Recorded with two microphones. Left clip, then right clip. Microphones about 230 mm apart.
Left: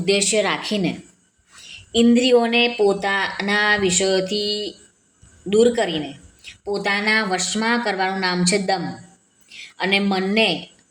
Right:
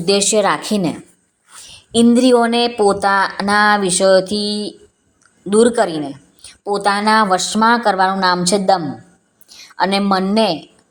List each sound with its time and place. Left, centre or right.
0.0 s speech: centre